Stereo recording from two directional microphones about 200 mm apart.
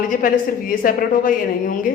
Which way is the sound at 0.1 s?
40° left (ahead or behind).